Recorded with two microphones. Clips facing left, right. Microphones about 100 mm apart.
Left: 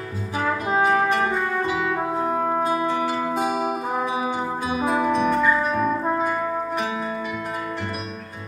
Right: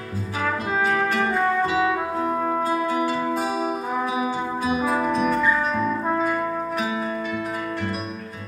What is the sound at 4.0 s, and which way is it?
Music, 30° left (ahead or behind).